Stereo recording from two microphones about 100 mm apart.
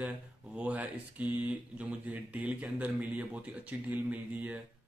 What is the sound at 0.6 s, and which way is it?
Speech, 15° right (ahead or behind).